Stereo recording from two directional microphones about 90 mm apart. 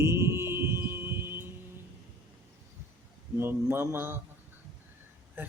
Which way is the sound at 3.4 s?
25° right (ahead or behind).